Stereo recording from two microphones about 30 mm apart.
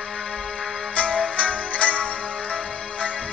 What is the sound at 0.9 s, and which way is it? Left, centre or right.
Music, left.